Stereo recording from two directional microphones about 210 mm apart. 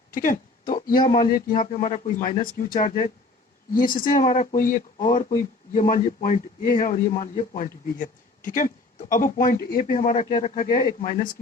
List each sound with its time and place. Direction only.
0.1 s a sound: 40° left (ahead or behind)
0.9 s speech: 25° left (ahead or behind)
1.2 s speech: 40° left (ahead or behind)